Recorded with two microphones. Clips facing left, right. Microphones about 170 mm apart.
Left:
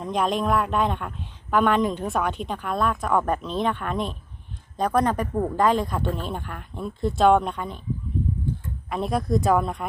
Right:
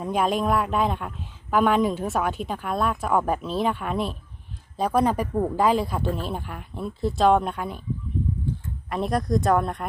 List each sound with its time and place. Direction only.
0.0 s speech: 5° right (ahead or behind)
8.9 s speech: centre (ahead or behind)